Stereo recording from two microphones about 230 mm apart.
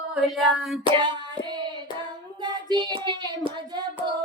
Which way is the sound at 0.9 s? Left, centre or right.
Centre.